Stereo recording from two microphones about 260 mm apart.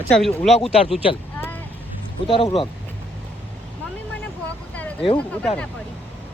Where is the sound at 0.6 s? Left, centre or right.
Left.